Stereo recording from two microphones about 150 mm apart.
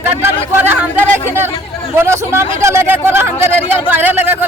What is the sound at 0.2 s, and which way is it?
Speech, 15° right (ahead or behind).